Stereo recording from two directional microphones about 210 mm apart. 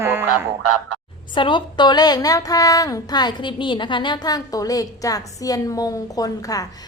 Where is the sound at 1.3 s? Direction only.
20° left (ahead or behind).